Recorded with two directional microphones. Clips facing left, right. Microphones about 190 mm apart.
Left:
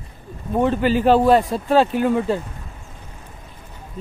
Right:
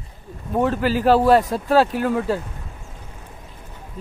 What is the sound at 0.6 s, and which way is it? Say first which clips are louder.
Speech: left 2 dB; 5° right (ahead or behind).